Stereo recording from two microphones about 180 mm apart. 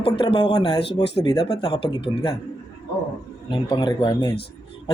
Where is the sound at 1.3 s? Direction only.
20° left (ahead or behind).